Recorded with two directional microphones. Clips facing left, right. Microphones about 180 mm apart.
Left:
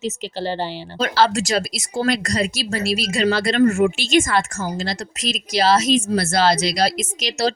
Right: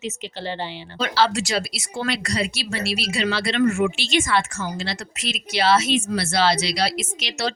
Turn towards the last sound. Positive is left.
turn(degrees=40)  # may be behind; listen again after turning